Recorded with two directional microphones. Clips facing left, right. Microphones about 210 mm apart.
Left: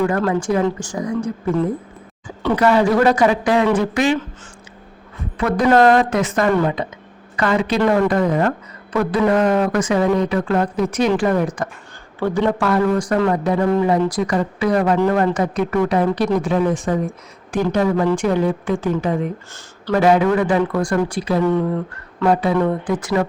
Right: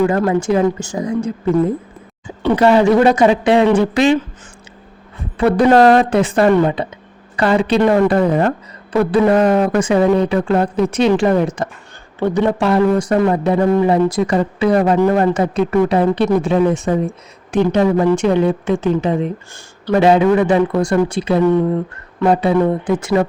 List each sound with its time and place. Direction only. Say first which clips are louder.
0.0 s speech: right 3 dB; 20° right (ahead or behind)
5.4 s a woman's voice: right 4 dB; 30° right (ahead or behind)